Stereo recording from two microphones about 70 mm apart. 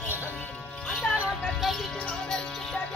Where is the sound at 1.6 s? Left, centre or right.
Centre.